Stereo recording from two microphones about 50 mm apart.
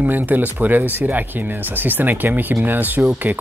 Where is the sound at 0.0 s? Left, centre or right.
Right.